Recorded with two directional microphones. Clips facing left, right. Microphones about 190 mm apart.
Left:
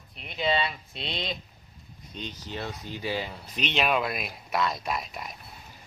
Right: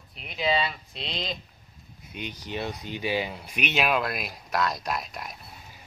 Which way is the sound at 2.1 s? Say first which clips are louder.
Right 3 dB; 15° right (ahead or behind).